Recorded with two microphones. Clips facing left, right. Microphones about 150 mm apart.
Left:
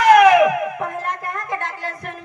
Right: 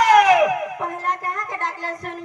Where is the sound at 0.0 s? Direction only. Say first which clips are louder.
Left 3 dB; 40° right (ahead or behind).